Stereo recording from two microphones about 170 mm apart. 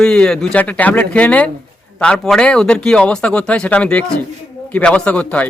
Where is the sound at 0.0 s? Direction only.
5° left (ahead or behind).